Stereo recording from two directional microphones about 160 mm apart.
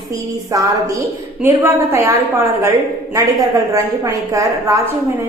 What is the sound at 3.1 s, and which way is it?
A woman's voice, 20° right (ahead or behind).